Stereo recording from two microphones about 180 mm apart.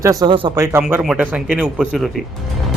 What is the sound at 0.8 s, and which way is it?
Speech, 5° right (ahead or behind).